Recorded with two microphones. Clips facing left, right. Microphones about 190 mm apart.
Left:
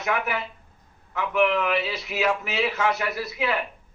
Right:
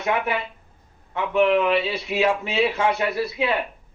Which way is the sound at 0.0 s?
30° right (ahead or behind).